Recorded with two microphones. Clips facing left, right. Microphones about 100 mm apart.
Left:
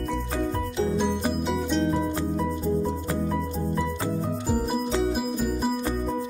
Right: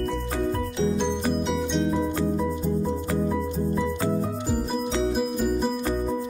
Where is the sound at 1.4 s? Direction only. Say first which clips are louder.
Even; centre (ahead or behind).